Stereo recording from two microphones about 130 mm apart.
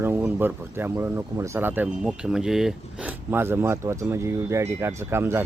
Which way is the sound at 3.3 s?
15° right (ahead or behind).